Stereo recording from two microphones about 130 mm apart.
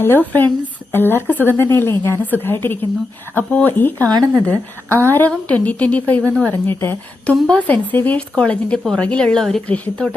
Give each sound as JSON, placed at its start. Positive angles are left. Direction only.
{"t": 0.0, "sound": "speech", "side_deg": 15}